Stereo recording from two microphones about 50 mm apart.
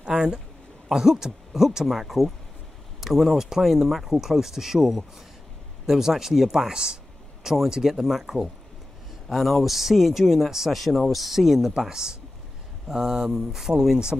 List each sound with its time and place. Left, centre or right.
0.0 s speech: centre
7.4 s speech: centre